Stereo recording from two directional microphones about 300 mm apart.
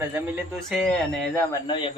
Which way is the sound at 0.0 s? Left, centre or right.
Centre.